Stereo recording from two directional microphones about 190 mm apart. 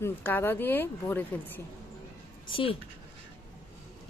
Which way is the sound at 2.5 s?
30° left (ahead or behind).